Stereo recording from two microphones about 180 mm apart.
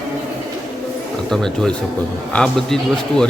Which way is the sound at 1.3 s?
5° left (ahead or behind).